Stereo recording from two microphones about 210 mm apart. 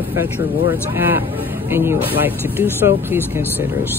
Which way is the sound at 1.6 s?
10° right (ahead or behind).